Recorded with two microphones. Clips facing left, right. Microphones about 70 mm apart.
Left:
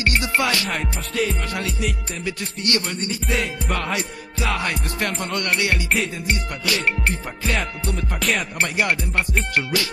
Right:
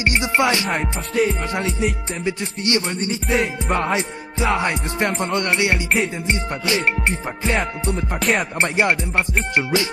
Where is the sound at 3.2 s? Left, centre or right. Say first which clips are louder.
Right 4 dB; centre.